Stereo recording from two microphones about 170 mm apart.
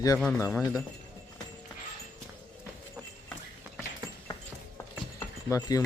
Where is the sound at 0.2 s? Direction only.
15° left (ahead or behind).